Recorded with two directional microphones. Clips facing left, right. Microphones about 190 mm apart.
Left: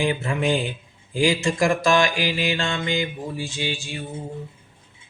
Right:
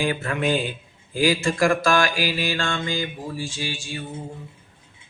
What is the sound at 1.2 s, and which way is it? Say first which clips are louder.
Mantra: even; 15° left (ahead or behind).